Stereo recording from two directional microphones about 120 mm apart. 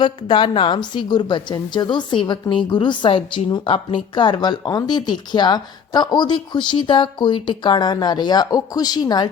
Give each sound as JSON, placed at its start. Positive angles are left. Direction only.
{"t": 0.0, "sound": "a woman's voice", "side_deg": 45}